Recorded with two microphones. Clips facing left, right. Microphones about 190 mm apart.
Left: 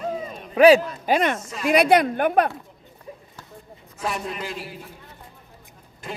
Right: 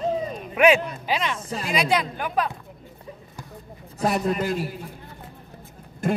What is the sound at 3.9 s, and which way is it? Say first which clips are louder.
Speech: right 6 dB; 40° right (ahead or behind).